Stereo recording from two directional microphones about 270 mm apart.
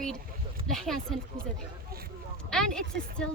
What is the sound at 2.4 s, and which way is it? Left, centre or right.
Speech, centre.